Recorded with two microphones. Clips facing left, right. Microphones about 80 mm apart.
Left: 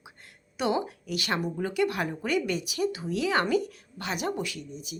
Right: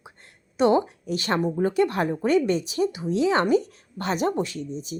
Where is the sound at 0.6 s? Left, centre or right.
Right.